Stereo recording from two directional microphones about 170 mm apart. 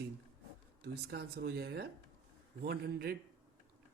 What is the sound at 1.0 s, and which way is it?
Speech, 75° right (ahead or behind).